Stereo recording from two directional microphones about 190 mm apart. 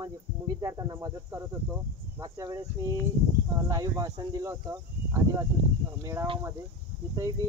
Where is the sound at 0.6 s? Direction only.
20° right (ahead or behind).